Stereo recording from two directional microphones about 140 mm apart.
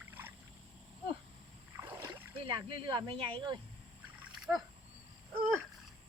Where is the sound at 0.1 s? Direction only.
15° right (ahead or behind).